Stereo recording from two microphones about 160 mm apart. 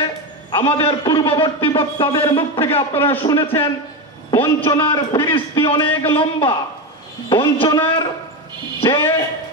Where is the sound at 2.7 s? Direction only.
15° left (ahead or behind).